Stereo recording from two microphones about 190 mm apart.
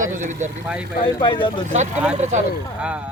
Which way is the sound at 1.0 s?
25° left (ahead or behind).